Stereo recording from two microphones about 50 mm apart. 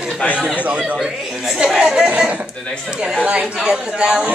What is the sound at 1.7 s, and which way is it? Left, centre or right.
Speech, centre.